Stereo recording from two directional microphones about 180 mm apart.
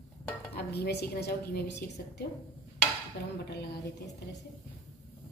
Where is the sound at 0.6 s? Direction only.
65° left (ahead or behind).